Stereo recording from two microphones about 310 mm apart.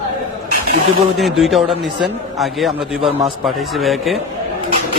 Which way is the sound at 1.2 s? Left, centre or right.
Centre.